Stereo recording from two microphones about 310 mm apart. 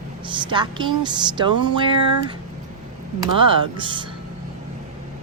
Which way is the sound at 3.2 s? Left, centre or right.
Centre.